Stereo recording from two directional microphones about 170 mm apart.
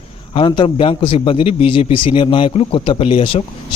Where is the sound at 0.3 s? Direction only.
30° left (ahead or behind).